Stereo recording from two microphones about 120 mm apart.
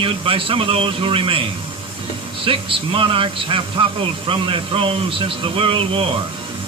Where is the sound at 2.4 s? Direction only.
45° right (ahead or behind).